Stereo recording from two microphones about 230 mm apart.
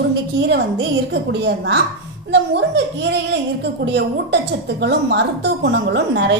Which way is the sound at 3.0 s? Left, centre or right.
Right.